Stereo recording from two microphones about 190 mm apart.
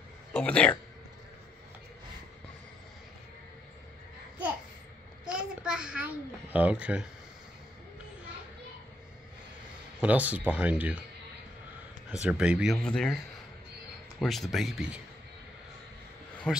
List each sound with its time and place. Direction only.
0.3 s speech: 5° left (ahead or behind)
5.2 s a sound: 5° right (ahead or behind)
6.5 s speech: 5° right (ahead or behind)
9.9 s speech: 10° right (ahead or behind)
12.1 s speech: 5° right (ahead or behind)
14.2 s speech: centre (ahead or behind)
16.5 s a man's voice: 5° left (ahead or behind)